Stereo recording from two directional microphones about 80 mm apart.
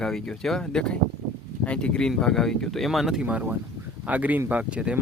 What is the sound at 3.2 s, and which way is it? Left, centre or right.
Speech, centre.